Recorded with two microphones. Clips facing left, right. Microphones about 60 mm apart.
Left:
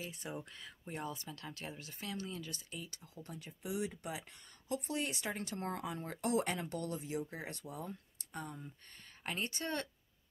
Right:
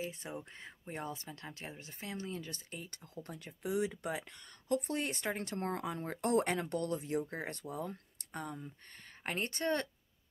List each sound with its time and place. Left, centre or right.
0.0 s a woman's voice: right